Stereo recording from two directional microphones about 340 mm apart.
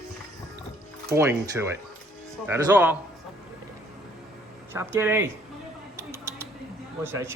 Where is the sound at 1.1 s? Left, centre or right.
Centre.